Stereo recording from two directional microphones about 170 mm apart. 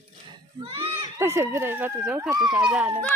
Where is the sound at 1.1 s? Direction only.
15° right (ahead or behind).